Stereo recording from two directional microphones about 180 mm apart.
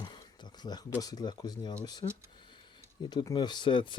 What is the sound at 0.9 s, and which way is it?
Speech, 20° left (ahead or behind).